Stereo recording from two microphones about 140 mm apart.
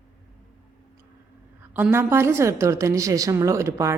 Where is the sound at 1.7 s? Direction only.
15° right (ahead or behind).